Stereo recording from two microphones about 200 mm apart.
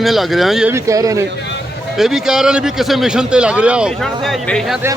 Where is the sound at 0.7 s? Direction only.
15° right (ahead or behind).